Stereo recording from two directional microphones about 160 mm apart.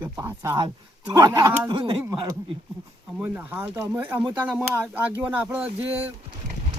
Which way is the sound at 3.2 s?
10° right (ahead or behind).